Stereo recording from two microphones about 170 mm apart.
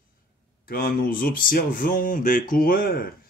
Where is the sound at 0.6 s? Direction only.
60° left (ahead or behind).